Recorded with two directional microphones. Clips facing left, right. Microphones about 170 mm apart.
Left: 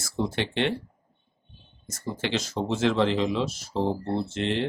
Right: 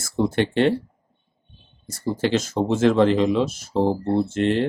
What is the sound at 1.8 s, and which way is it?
Speech, 30° right (ahead or behind).